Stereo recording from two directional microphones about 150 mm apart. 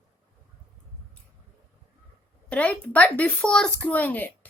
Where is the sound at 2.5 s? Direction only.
10° left (ahead or behind).